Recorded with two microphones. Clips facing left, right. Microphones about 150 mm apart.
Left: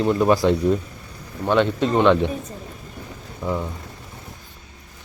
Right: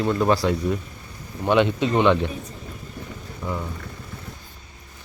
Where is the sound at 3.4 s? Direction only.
10° left (ahead or behind).